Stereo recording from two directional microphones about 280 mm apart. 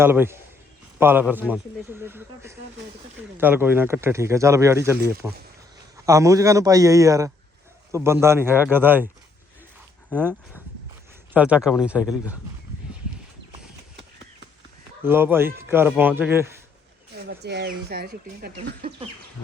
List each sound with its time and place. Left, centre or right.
0.0 s speech: centre
10.1 s speech: centre
11.3 s speech: centre
15.0 s speech: centre
17.2 s speech: right